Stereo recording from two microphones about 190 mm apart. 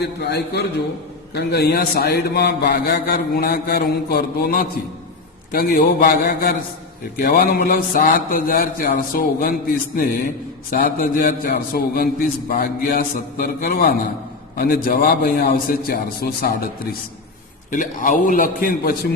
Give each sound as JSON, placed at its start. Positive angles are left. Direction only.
{"t": 0.0, "sound": "a man's voice", "side_deg": 60}